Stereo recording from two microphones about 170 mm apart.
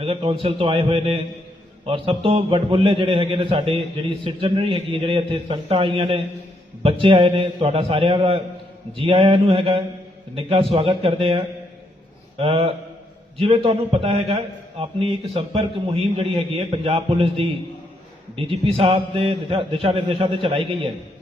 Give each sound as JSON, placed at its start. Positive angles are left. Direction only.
{"t": 0.0, "sound": "a man's voice", "side_deg": -35}